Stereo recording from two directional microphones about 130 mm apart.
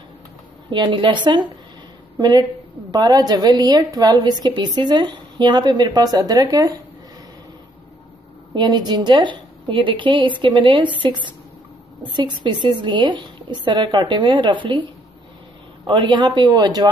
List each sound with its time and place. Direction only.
0.7 s a woman's voice: 35° right (ahead or behind)
8.5 s a woman's voice: 35° right (ahead or behind)
15.9 s a woman's voice: 35° right (ahead or behind)